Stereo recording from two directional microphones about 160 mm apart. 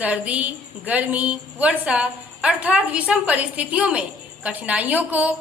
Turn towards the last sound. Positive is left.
turn(degrees=-10)  # may be behind; listen again after turning